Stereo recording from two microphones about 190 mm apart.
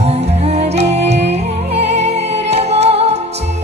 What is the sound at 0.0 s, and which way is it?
Music, 35° right (ahead or behind).